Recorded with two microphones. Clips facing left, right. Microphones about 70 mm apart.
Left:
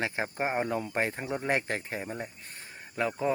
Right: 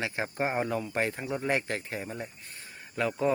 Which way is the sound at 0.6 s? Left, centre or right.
Left.